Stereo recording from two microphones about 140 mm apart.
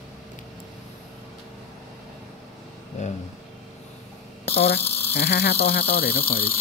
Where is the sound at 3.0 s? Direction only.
55° left (ahead or behind).